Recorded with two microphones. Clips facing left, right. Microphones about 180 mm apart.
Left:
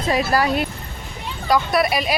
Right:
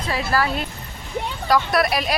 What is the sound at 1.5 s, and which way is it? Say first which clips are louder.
Speech: left 1 dB; centre (ahead or behind).